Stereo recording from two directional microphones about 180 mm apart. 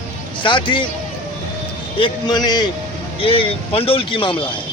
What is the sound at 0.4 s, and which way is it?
Speech, 25° left (ahead or behind).